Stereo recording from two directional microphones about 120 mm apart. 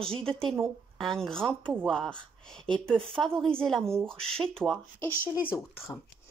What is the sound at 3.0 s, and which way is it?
Speech, 50° right (ahead or behind).